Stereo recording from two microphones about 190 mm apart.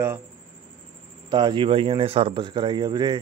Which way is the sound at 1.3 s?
25° right (ahead or behind).